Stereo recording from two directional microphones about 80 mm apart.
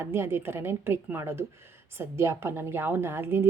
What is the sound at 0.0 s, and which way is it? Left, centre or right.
A woman's voice, right.